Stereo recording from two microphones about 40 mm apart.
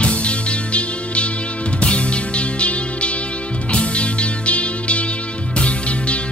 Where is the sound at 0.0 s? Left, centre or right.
Left.